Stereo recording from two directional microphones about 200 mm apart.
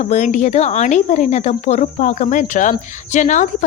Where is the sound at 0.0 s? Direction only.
35° left (ahead or behind).